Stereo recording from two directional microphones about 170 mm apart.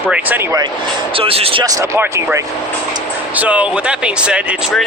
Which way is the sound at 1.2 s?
35° right (ahead or behind).